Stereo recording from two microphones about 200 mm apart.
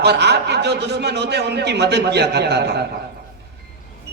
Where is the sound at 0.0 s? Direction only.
55° right (ahead or behind).